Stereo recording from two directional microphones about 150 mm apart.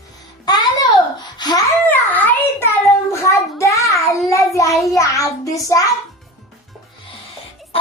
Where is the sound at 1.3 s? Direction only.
25° left (ahead or behind).